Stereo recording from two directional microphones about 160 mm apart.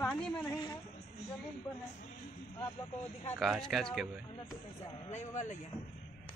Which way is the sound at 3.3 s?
Centre (ahead or behind).